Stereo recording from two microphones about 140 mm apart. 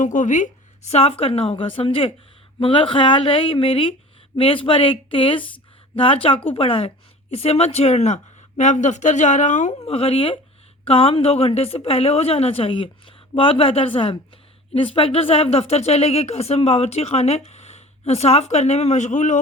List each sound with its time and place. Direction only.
0.0 s speech: 60° left (ahead or behind)